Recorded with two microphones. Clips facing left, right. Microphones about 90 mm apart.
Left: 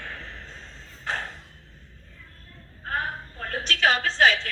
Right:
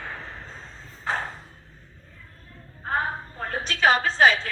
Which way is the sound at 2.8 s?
25° right (ahead or behind).